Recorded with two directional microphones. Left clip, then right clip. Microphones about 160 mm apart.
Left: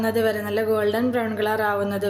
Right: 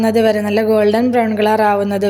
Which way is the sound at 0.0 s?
40° right (ahead or behind).